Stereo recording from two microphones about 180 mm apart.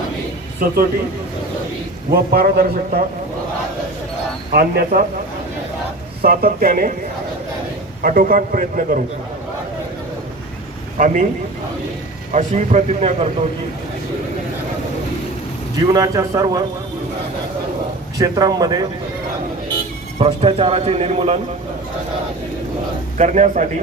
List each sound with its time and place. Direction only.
0.6 s a man's voice: 55° right (ahead or behind)
2.3 s a man's voice: 55° right (ahead or behind)
4.5 s a man's voice: 60° right (ahead or behind)
6.2 s a man's voice: 55° right (ahead or behind)
8.0 s a man's voice: 50° right (ahead or behind)
10.9 s a man's voice: 45° right (ahead or behind)
12.3 s speech: 40° right (ahead or behind)
15.9 s a man's voice: 20° right (ahead or behind)
18.2 s a man's voice: 20° right (ahead or behind)
20.1 s speech: 30° right (ahead or behind)
23.1 s speech: 40° right (ahead or behind)